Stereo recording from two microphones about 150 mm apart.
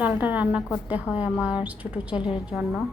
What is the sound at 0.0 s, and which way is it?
A woman's voice, 10° right (ahead or behind).